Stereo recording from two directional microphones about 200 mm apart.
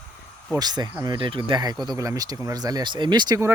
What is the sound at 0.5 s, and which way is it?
Speech, 20° right (ahead or behind).